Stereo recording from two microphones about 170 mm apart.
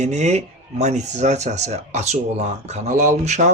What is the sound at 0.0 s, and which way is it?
Speech, 40° right (ahead or behind).